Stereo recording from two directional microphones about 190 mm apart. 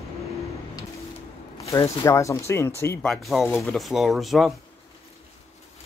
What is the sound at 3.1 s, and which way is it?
Speech, centre (ahead or behind).